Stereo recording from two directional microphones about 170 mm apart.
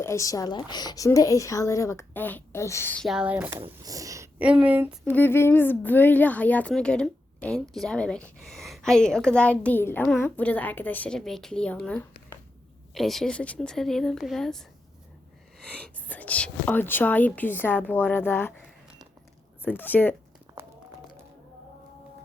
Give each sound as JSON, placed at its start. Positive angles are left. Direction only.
{"t": 0.0, "sound": "speech", "side_deg": 15}
{"t": 3.0, "sound": "speech", "side_deg": -5}
{"t": 3.7, "sound": "speech", "side_deg": -20}
{"t": 4.4, "sound": "speech", "side_deg": -5}
{"t": 5.0, "sound": "a woman's voice", "side_deg": 10}
{"t": 15.6, "sound": "a woman's voice", "side_deg": 5}
{"t": 19.6, "sound": "a woman's voice", "side_deg": 10}
{"t": 20.6, "sound": "run", "side_deg": -10}